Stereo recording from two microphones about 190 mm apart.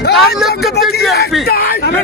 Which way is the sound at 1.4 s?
55° left (ahead or behind).